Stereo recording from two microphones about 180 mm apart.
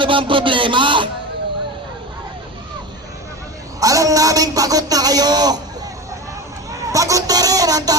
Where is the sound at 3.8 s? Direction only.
20° right (ahead or behind).